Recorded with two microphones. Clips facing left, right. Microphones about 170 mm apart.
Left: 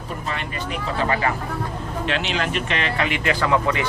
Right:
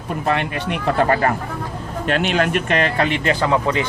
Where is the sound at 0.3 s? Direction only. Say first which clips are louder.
Right 9 dB; 65° right (ahead or behind); by 3.8 s 25° right (ahead or behind).